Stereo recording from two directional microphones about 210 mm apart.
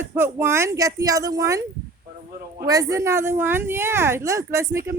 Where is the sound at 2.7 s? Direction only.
15° right (ahead or behind).